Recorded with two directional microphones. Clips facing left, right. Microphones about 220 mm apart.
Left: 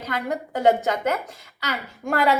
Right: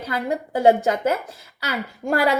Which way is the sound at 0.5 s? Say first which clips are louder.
Right 3 dB; 30° right (ahead or behind).